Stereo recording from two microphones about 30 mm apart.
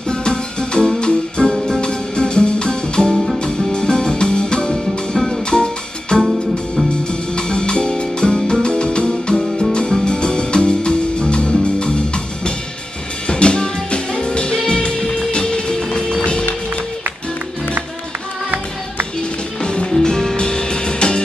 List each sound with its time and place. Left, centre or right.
0.1 s music: left
4.7 s music: centre
5.5 s music: left
13.3 s music: left
19.6 s music: left
19.9 s music: left